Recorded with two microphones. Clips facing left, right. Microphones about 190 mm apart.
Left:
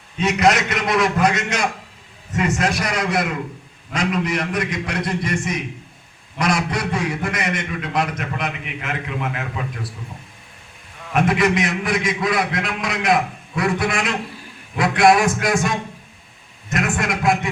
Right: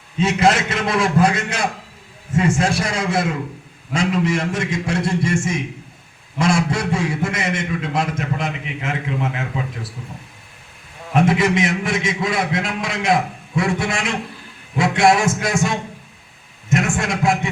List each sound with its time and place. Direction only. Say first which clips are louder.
0.2 s a man's voice: right 1 dB; 25° right (ahead or behind)
11.1 s a man's voice: right 1 dB; 25° right (ahead or behind)